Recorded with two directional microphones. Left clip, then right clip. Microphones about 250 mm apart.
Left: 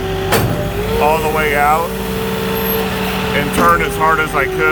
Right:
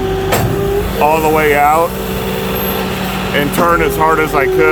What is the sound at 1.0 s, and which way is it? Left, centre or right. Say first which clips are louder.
Speech: right 3 dB; right.